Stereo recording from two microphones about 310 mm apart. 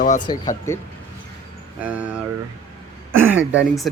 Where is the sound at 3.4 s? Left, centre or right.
Right.